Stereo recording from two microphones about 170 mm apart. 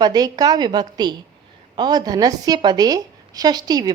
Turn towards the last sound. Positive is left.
turn(degrees=-25)  # may be behind; listen again after turning